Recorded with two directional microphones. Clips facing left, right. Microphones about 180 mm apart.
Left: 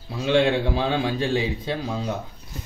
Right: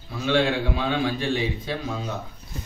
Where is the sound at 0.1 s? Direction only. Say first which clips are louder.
Left 2 dB; 30° left (ahead or behind).